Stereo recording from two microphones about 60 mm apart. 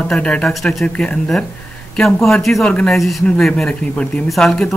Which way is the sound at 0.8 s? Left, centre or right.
Centre.